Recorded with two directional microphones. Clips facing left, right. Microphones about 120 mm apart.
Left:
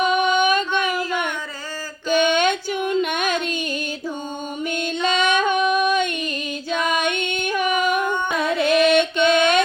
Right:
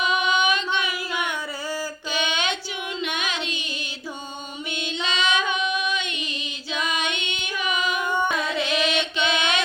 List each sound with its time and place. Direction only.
0.0 s music: 45° left (ahead or behind)
2.0 s child singing: 50° left (ahead or behind)
4.7 s female singing: 50° left (ahead or behind)
8.4 s music: 50° left (ahead or behind)